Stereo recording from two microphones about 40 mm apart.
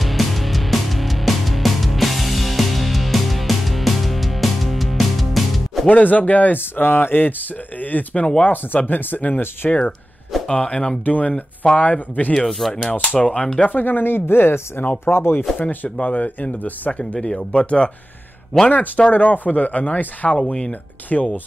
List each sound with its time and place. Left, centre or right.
0.0 s music: centre
5.9 s speech: left
6.6 s speech: left
7.8 s speech: left
9.6 s speech: left
11.1 s speech: left
12.4 s speech: centre
13.7 s speech: left
15.7 s speech: left
17.0 s speech: left
18.7 s speech: left